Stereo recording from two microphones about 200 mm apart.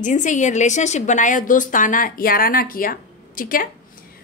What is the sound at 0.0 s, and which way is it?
A woman's voice, 40° left (ahead or behind).